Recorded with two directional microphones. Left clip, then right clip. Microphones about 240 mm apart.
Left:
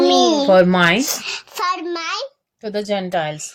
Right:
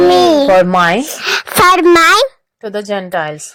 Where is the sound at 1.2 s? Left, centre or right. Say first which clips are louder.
Right 13 dB; right.